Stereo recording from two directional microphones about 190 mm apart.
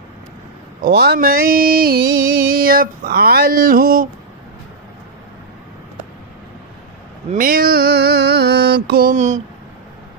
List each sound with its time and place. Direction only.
0.7 s music: 55° right (ahead or behind)
7.2 s mantra: 45° right (ahead or behind)